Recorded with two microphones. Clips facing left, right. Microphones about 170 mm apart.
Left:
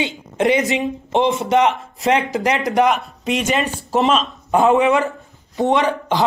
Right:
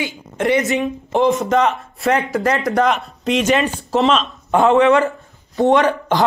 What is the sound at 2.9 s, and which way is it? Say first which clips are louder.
Speech: right 1 dB; 5° left (ahead or behind).